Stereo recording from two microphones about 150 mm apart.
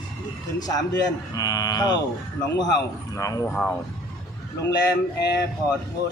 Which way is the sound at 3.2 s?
20° left (ahead or behind).